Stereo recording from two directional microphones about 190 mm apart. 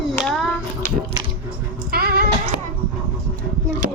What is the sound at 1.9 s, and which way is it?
Music, 55° right (ahead or behind).